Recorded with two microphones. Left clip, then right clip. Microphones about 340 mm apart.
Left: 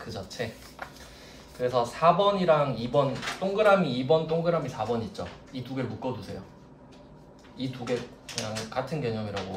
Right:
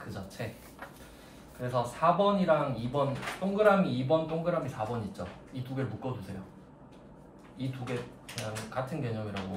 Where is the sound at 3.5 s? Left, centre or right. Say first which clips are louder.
Left 3 dB; left.